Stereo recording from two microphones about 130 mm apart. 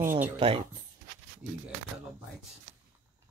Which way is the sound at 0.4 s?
45° right (ahead or behind).